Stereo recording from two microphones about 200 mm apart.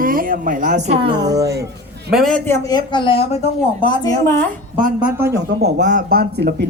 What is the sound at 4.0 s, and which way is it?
Speech, 15° left (ahead or behind).